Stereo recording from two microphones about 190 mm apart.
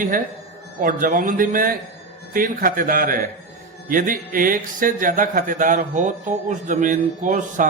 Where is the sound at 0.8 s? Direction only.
45° right (ahead or behind).